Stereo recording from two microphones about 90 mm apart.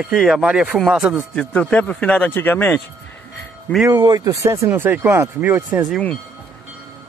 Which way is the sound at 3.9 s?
45° right (ahead or behind).